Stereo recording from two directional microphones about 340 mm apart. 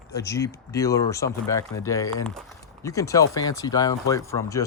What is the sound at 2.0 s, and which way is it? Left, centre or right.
Speech, left.